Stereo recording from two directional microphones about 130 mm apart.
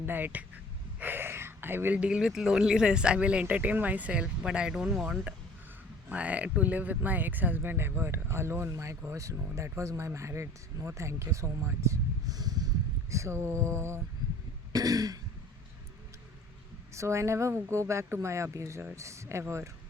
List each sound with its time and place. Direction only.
0.0 s speech: 15° right (ahead or behind)
16.9 s speech: 20° right (ahead or behind)